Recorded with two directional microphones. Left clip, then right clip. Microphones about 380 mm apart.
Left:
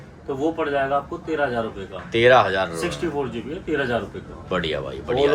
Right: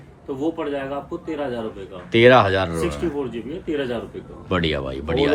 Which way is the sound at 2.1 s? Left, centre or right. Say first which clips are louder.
Right 2 dB; centre.